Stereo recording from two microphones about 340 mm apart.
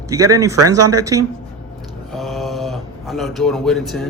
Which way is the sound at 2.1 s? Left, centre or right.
Centre.